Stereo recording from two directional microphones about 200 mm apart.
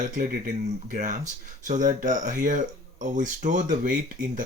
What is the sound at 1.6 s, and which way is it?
Speech, 40° right (ahead or behind).